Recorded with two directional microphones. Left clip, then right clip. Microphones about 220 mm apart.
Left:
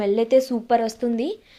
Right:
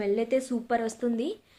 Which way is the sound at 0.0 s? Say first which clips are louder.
Left 8 dB; 30° left (ahead or behind).